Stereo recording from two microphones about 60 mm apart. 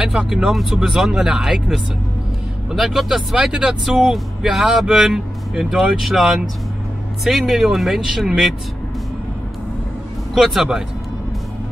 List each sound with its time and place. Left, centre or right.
0.0 s speech: centre
10.3 s speech: centre